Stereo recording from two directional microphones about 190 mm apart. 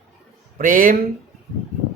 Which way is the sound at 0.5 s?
45° right (ahead or behind).